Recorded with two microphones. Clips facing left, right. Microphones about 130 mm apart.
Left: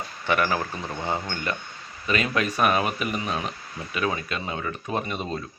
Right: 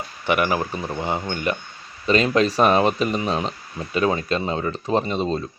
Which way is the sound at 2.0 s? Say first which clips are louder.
Right 7 dB; 30° right (ahead or behind).